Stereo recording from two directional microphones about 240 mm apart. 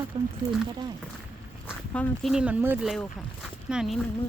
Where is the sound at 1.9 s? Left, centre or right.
Centre.